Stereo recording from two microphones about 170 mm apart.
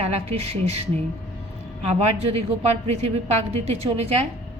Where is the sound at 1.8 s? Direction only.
40° right (ahead or behind).